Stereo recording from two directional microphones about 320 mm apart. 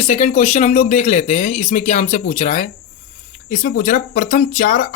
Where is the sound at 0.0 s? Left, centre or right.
Left.